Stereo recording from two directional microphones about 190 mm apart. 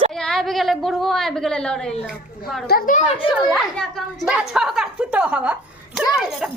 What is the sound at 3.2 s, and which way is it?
A woman's voice, 5° right (ahead or behind).